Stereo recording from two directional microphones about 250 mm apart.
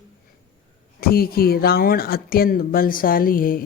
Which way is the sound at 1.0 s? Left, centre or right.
Left.